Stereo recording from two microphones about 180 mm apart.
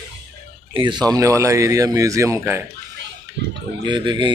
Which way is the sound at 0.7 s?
25° right (ahead or behind).